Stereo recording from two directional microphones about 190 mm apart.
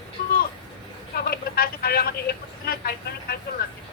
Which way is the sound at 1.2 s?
55° left (ahead or behind).